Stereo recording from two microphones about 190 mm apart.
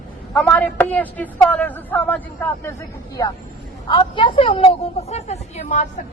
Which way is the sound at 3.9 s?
25° left (ahead or behind).